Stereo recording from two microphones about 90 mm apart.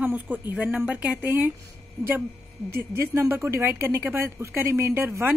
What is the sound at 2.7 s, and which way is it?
A woman's voice, 25° right (ahead or behind).